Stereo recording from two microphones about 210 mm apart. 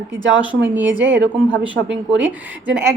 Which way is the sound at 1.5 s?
5° right (ahead or behind).